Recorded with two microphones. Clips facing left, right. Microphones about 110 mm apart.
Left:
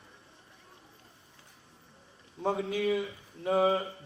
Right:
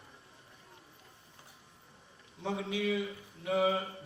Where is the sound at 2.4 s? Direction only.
45° left (ahead or behind).